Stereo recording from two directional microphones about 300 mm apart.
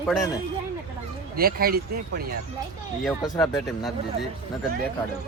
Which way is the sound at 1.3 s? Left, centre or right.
Right.